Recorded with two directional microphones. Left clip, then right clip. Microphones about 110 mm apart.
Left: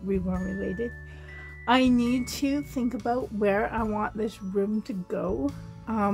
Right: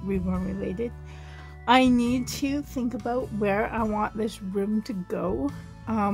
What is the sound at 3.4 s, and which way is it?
Speech, 20° right (ahead or behind).